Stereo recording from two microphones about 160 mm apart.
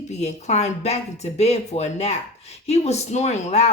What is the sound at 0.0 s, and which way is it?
A woman's voice, 45° left (ahead or behind).